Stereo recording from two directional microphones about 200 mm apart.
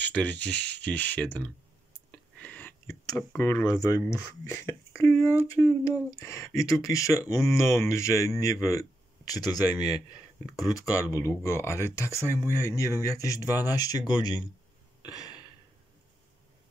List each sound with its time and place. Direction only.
0.0 s speech: 5° left (ahead or behind)
2.0 s a sound: 5° left (ahead or behind)
4.6 s speech: 15° left (ahead or behind)
12.2 s speech: 15° right (ahead or behind)
12.7 s speech: 15° left (ahead or behind)
15.0 s a sound: 20° left (ahead or behind)